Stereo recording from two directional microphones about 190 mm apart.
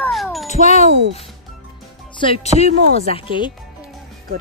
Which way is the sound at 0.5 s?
35° left (ahead or behind).